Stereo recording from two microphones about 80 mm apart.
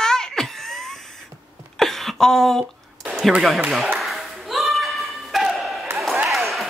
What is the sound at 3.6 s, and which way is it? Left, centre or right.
Speech, centre.